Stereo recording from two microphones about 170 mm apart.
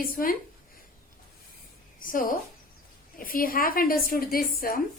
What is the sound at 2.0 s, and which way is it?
A woman's voice, 55° left (ahead or behind).